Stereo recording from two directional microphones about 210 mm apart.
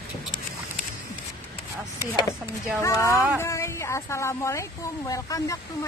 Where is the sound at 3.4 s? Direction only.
15° left (ahead or behind).